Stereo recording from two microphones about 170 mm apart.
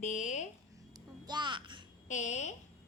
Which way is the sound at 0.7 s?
25° right (ahead or behind).